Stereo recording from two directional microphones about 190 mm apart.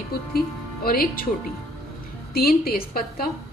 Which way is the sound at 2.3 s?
50° left (ahead or behind).